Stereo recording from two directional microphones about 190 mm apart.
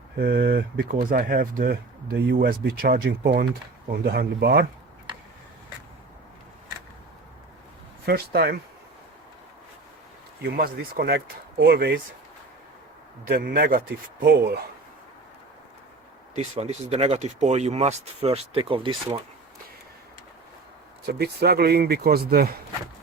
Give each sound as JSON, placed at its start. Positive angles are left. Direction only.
{"t": 0.2, "sound": "speech", "side_deg": -50}
{"t": 8.0, "sound": "speech", "side_deg": -55}
{"t": 10.4, "sound": "speech", "side_deg": -55}
{"t": 13.3, "sound": "speech", "side_deg": -50}
{"t": 16.3, "sound": "speech", "side_deg": -35}
{"t": 21.1, "sound": "speech", "side_deg": -55}